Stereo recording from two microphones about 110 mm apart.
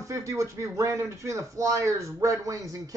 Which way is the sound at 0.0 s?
30° right (ahead or behind).